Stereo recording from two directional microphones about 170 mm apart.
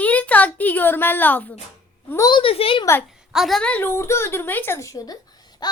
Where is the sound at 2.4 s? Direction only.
35° left (ahead or behind).